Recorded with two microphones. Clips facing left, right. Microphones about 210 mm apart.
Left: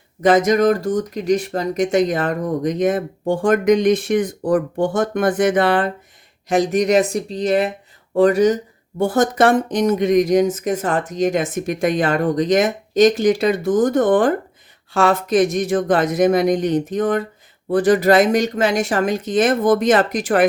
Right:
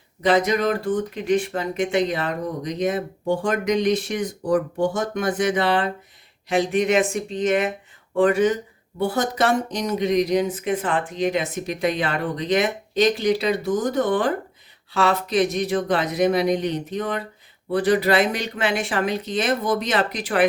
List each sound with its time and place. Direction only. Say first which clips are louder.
0.2 s speech: left 5 dB; 45° left (ahead or behind)